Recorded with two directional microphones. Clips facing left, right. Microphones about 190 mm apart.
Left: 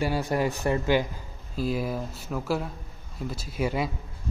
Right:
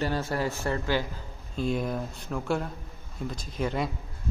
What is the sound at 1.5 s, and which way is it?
Speech, 5° left (ahead or behind).